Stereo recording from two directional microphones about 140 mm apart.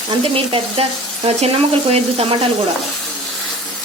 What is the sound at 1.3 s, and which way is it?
Sizzle, 45° right (ahead or behind).